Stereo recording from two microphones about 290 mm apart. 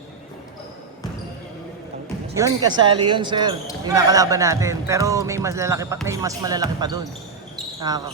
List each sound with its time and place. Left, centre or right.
2.3 s speech: centre